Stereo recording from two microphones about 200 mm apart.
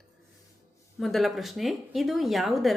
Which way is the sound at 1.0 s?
Centre (ahead or behind).